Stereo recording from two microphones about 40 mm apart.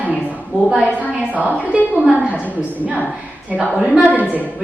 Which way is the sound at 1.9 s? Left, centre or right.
Right.